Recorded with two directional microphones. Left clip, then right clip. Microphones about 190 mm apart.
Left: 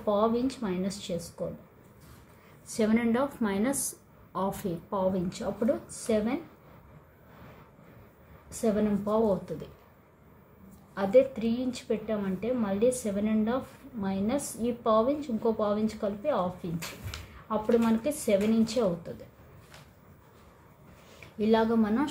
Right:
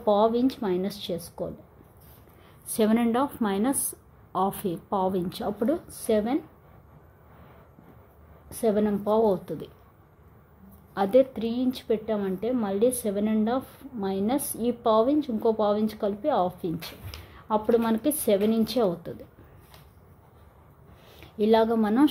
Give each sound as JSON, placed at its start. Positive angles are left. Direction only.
{"t": 0.0, "sound": "a woman's voice", "side_deg": -50}
{"t": 2.7, "sound": "a woman's voice", "side_deg": -50}
{"t": 8.5, "sound": "a woman's voice", "side_deg": -45}
{"t": 11.0, "sound": "a woman's voice", "side_deg": -55}
{"t": 17.5, "sound": "a woman's voice", "side_deg": -55}
{"t": 21.4, "sound": "a woman's voice", "side_deg": -50}